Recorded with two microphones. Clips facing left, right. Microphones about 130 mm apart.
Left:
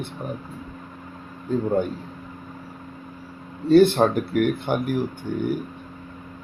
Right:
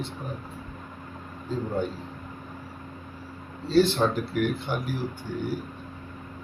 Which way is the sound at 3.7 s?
55° left (ahead or behind).